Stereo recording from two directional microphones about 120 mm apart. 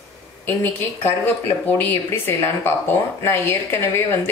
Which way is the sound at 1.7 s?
15° left (ahead or behind).